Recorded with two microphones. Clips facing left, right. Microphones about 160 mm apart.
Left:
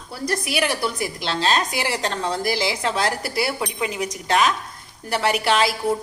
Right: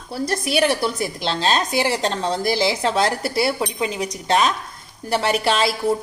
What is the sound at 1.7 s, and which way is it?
A woman's voice, 25° right (ahead or behind).